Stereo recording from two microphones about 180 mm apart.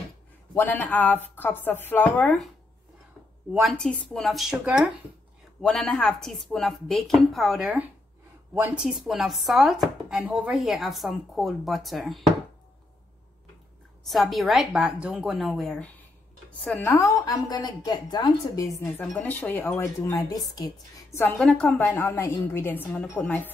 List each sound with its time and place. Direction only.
0.6 s a woman's voice: 10° left (ahead or behind)
3.5 s chopping: centre (ahead or behind)
14.0 s chopping: centre (ahead or behind)
16.4 s a woman's voice: 10° left (ahead or behind)
21.4 s a woman's voice: 5° left (ahead or behind)